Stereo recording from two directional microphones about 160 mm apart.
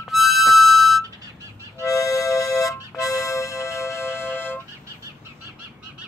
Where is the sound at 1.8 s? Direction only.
20° left (ahead or behind).